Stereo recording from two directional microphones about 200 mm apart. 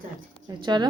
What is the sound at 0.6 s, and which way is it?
Speech, 20° right (ahead or behind).